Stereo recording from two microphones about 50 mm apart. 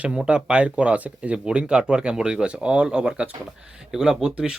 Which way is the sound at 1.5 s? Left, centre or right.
Centre.